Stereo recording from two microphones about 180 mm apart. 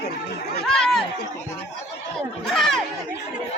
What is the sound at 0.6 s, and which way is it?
Chatter, 5° left (ahead or behind).